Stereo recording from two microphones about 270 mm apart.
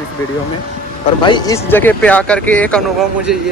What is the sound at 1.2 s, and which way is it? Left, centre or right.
Speech, centre.